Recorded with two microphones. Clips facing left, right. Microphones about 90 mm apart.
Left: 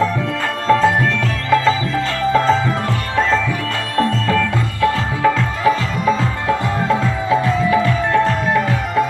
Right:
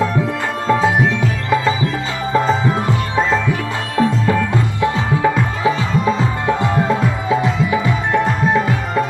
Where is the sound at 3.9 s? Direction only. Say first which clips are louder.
Right 1 dB; 15° right (ahead or behind).